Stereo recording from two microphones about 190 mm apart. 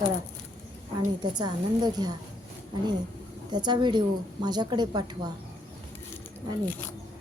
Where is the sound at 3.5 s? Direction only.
20° right (ahead or behind).